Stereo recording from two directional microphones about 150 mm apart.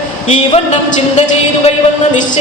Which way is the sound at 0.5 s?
45° left (ahead or behind).